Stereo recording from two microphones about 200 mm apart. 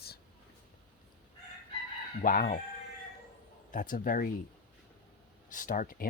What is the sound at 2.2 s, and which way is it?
Speech, 45° left (ahead or behind).